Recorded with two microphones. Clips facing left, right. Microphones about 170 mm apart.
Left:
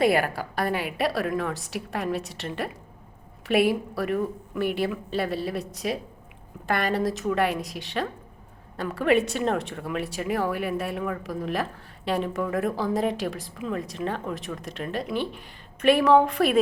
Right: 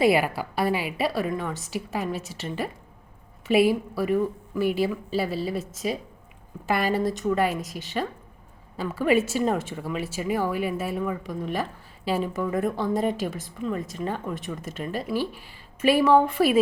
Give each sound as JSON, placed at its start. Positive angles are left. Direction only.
{"t": 0.0, "sound": "a woman's voice", "side_deg": -10}